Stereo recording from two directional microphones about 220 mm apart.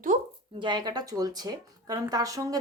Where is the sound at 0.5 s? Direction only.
20° right (ahead or behind).